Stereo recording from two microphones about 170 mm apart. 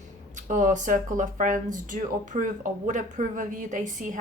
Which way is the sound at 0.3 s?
45° right (ahead or behind).